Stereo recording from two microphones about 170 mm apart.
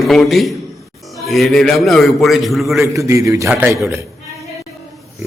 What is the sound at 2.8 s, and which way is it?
Speech, 20° right (ahead or behind).